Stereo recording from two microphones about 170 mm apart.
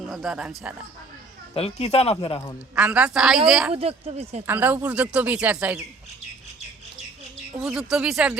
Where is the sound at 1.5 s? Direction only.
40° left (ahead or behind).